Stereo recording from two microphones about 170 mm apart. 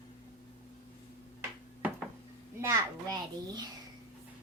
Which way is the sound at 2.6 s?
20° right (ahead or behind).